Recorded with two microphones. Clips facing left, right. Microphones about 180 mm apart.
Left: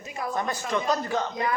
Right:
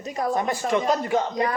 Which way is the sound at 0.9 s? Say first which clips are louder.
Right 4 dB; 25° right (ahead or behind).